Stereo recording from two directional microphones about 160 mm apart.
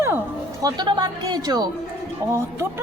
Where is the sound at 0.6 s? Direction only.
25° right (ahead or behind).